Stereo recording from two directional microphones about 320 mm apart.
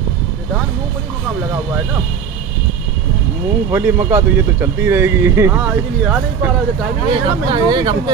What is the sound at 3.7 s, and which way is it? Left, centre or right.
Speech, centre.